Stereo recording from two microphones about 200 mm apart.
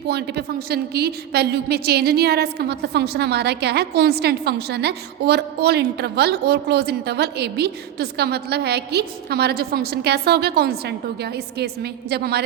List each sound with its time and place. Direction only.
0.1 s a woman's voice: 55° right (ahead or behind)